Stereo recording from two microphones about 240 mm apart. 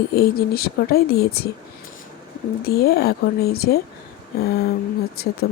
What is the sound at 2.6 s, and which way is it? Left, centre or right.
Speech, left.